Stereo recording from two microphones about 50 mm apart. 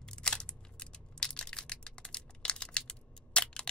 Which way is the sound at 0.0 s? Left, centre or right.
Centre.